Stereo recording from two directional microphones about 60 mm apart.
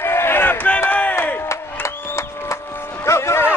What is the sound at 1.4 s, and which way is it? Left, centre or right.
Crowd, left.